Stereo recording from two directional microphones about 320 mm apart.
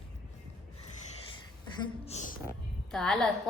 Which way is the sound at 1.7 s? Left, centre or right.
Centre.